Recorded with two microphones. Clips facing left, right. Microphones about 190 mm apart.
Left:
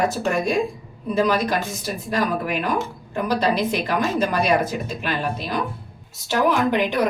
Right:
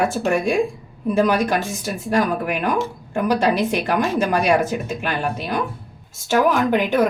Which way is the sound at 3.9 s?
45° right (ahead or behind).